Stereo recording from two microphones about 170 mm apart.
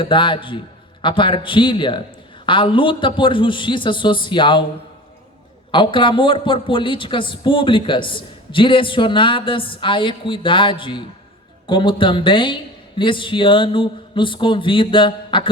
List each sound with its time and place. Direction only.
0.0 s speech: 30° left (ahead or behind)
5.7 s speech: 30° left (ahead or behind)